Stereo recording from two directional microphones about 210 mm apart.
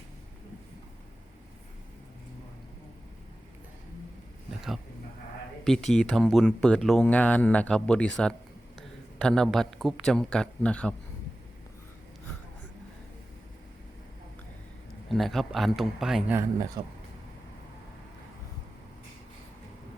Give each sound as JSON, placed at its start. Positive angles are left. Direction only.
{"t": 5.6, "sound": "speech", "side_deg": 0}
{"t": 15.1, "sound": "speech", "side_deg": 0}
{"t": 16.8, "sound": "speech", "side_deg": -20}